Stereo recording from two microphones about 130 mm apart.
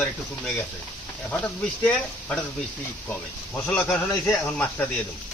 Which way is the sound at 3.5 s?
15° left (ahead or behind).